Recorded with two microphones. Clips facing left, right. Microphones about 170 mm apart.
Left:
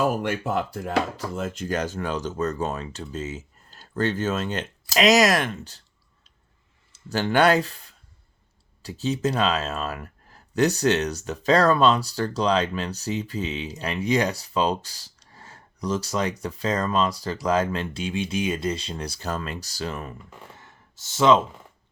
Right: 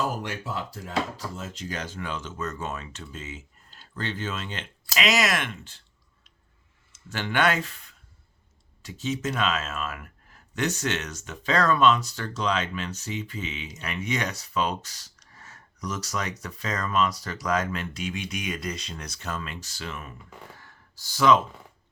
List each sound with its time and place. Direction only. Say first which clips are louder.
0.0 s speech: left 6 dB; 55° left (ahead or behind); by 5.8 s 40° left (ahead or behind)
6.9 s speech: left 6 dB; 35° left (ahead or behind)
20.6 s sigh: left 2 dB; 20° left (ahead or behind)